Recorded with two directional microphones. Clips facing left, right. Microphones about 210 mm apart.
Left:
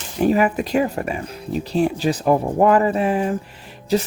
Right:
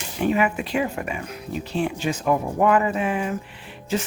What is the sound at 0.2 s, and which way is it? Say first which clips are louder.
Speech: left 4 dB; 40° left (ahead or behind).